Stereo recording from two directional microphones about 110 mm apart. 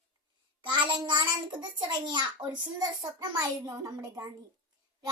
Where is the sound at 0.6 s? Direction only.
45° right (ahead or behind).